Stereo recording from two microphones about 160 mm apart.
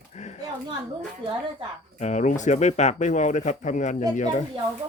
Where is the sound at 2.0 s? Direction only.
50° left (ahead or behind).